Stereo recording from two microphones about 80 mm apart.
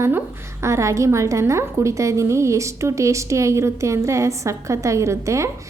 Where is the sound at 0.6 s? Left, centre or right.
Right.